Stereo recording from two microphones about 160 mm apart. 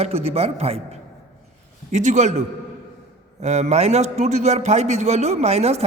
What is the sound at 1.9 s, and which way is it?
Speech, 50° right (ahead or behind).